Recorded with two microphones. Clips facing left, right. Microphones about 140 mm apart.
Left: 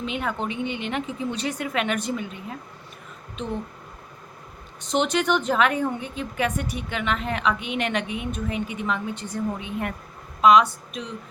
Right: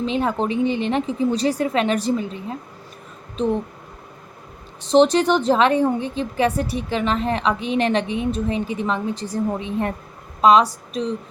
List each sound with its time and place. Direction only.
0.0 s a woman's voice: 35° right (ahead or behind)
4.8 s a woman's voice: 35° right (ahead or behind)